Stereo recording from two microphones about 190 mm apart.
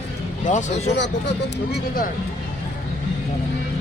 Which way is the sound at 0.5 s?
40° left (ahead or behind).